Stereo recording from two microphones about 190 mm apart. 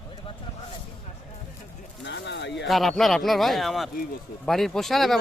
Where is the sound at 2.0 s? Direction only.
65° left (ahead or behind).